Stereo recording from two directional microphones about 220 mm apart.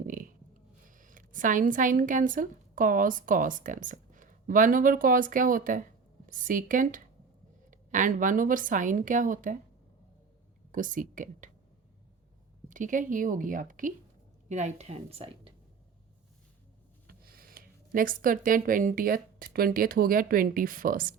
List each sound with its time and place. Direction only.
0.0 s a woman's voice: 40° right (ahead or behind)
10.7 s speech: 35° right (ahead or behind)
12.6 s a woman's voice: 35° right (ahead or behind)
17.1 s speech: 40° right (ahead or behind)